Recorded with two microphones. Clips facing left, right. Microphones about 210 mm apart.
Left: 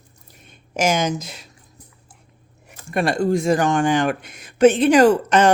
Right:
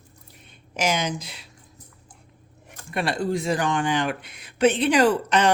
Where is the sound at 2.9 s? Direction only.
45° left (ahead or behind).